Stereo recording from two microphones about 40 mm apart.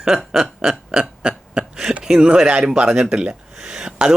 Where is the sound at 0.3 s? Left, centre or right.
Centre.